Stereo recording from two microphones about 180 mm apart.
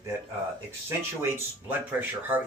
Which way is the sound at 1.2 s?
15° right (ahead or behind).